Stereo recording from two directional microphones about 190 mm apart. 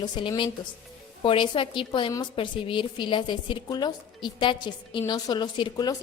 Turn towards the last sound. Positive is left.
turn(degrees=20)  # may be behind; listen again after turning